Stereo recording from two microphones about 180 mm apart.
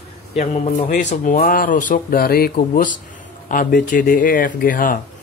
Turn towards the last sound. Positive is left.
turn(degrees=50)  # may be behind; listen again after turning